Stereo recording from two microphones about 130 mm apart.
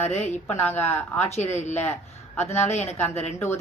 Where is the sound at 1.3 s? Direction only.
60° left (ahead or behind).